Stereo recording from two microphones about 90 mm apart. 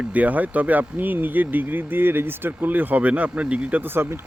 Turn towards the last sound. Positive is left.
turn(degrees=-25)  # may be behind; listen again after turning